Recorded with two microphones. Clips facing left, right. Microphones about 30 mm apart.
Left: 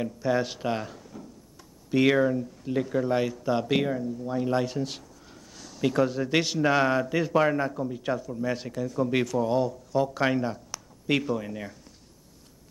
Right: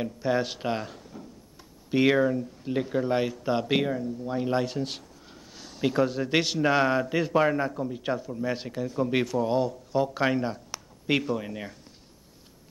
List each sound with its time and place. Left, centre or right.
0.0 s speech: centre
2.1 s a man's voice: centre
2.6 s a man's voice: right
4.6 s a sound: centre
6.0 s speech: centre
7.4 s a man's voice: centre
7.8 s speech: centre